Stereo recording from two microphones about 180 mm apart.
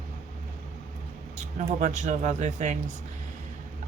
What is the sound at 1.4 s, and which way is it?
Speech, 40° right (ahead or behind).